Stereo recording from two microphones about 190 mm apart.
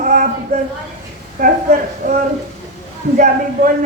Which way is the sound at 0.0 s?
40° right (ahead or behind).